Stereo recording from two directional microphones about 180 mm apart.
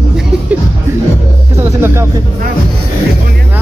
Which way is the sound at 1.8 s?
15° right (ahead or behind).